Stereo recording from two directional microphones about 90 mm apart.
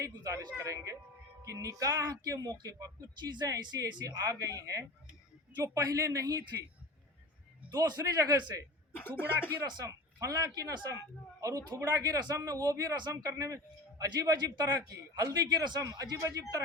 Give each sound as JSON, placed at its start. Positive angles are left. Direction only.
{"t": 0.0, "sound": "speech", "side_deg": -40}
{"t": 3.2, "sound": "a man's voice", "side_deg": -55}
{"t": 7.7, "sound": "a man's voice", "side_deg": -45}
{"t": 9.0, "sound": "speech", "side_deg": 20}
{"t": 9.8, "sound": "a man's voice", "side_deg": -40}